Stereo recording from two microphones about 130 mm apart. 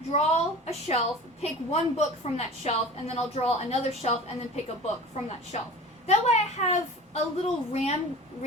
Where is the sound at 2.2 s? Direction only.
60° left (ahead or behind).